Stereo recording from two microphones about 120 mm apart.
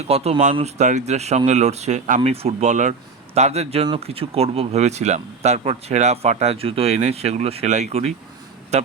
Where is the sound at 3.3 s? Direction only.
65° right (ahead or behind).